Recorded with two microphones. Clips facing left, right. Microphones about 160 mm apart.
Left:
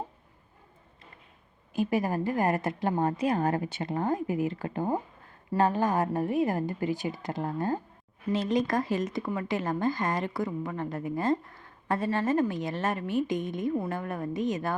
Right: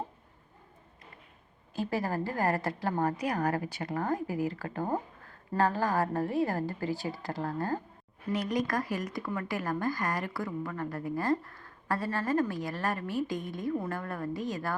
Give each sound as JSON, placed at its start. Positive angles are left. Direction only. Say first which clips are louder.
{"t": 1.7, "sound": "speech", "louder": "left 4 dB", "side_deg": 20}